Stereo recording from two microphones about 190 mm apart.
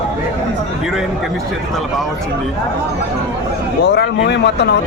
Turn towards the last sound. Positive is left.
turn(degrees=65)  # may be behind; listen again after turning